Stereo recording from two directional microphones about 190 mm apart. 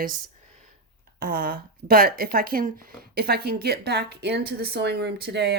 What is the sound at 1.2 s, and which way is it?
Speech, 55° right (ahead or behind).